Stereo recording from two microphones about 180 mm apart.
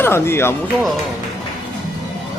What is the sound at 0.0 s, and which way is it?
Speech, 15° left (ahead or behind).